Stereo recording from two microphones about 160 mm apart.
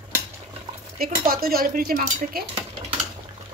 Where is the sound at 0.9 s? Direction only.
65° right (ahead or behind).